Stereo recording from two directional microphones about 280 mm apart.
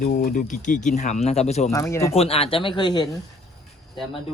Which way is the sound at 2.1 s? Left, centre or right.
Left.